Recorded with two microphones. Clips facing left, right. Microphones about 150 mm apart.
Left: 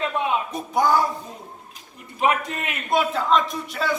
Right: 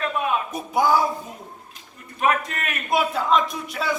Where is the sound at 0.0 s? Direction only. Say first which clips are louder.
Even; 20° left (ahead or behind).